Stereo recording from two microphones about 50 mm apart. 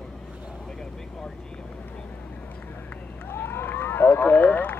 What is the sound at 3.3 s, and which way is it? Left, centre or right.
Vehicle, left.